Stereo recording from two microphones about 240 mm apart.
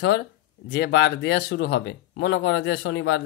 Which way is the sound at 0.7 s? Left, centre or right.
Left.